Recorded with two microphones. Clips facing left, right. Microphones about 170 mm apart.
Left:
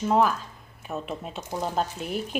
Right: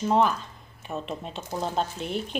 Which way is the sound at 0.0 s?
5° left (ahead or behind).